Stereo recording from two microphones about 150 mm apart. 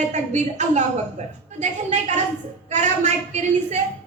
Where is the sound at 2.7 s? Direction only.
50° right (ahead or behind).